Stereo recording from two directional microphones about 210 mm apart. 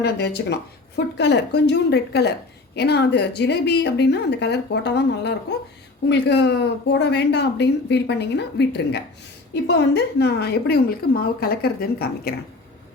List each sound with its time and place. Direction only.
0.0 s speech: 50° left (ahead or behind)